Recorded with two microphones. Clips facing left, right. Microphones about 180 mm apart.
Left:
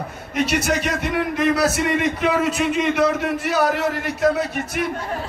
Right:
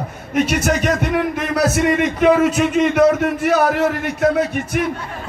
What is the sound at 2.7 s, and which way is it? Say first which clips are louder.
A man's voice: right 6 dB; 50° right (ahead or behind).